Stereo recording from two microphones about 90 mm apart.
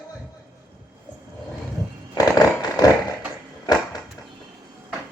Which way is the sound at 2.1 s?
50° left (ahead or behind).